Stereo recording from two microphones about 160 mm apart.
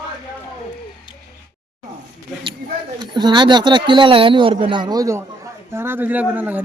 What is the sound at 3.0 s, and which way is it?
A man's voice, 30° right (ahead or behind).